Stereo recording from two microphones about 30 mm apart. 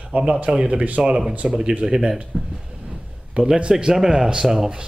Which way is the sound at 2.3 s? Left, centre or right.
Right.